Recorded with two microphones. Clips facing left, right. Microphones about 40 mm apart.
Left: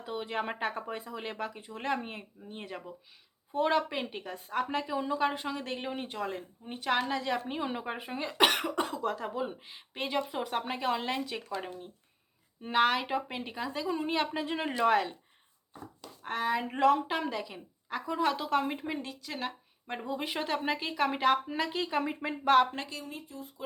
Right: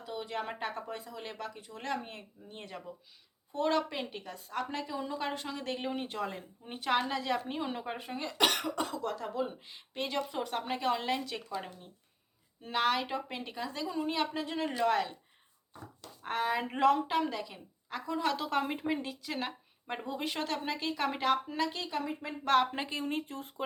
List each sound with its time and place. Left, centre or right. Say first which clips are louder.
0.0 s a woman's voice: left 3 dB; left
13.8 s speech: left 2 dB; left
14.8 s speech: left 3 dB; centre
16.2 s a woman's voice: left 1 dB; centre
21.8 s speech: left 4 dB; left
22.4 s a woman's voice: left 3 dB; centre
23.0 s speech: right 7 dB; right